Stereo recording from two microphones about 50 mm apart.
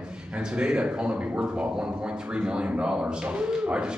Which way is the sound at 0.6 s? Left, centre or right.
Right.